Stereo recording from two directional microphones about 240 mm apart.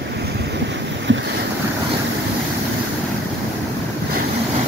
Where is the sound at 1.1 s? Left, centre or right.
Right.